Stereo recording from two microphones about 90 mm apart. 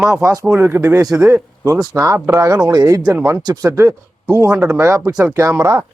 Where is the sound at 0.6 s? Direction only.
30° right (ahead or behind).